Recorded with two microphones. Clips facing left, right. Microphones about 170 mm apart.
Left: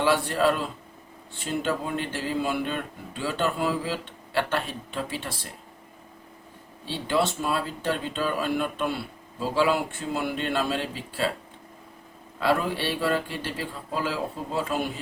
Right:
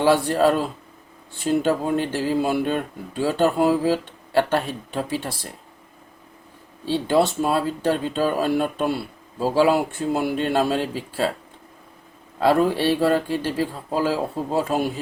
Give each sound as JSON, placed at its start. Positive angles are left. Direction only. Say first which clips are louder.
{"t": 0.0, "sound": "speech", "louder": "right 5 dB", "side_deg": -40}
{"t": 1.6, "sound": "speech", "louder": "right 7 dB", "side_deg": -40}
{"t": 7.1, "sound": "a man's voice", "louder": "right 5 dB", "side_deg": -40}
{"t": 12.4, "sound": "speech", "louder": "right 7 dB", "side_deg": -40}